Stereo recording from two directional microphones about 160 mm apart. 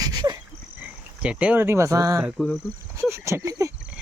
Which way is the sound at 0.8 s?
5° right (ahead or behind).